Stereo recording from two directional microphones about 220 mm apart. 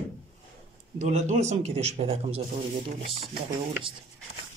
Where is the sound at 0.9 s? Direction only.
35° right (ahead or behind).